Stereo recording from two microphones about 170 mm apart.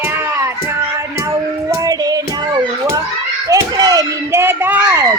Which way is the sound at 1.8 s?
20° right (ahead or behind).